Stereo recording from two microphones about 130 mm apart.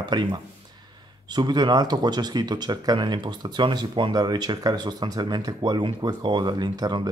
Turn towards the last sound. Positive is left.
turn(degrees=-30)  # may be behind; listen again after turning